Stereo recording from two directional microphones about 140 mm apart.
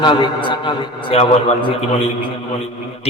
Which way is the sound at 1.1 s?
45° left (ahead or behind).